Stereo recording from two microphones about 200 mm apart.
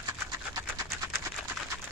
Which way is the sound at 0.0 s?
15° right (ahead or behind).